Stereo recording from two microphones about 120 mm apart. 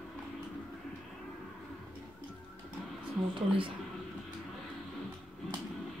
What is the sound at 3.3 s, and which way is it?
Speech, 45° right (ahead or behind).